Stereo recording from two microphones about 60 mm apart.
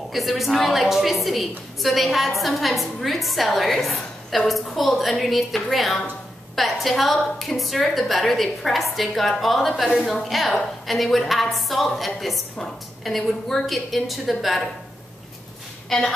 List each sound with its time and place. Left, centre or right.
0.1 s a woman's voice: centre
15.9 s a woman's voice: centre